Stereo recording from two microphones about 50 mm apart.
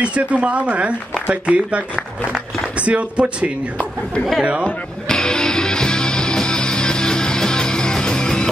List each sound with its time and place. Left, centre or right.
0.0 s speech: right
2.8 s speech: right
5.0 s music: centre